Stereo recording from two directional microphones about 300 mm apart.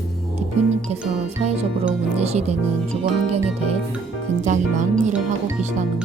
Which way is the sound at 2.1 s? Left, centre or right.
Right.